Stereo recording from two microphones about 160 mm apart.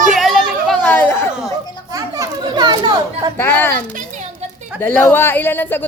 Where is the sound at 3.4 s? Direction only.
15° left (ahead or behind).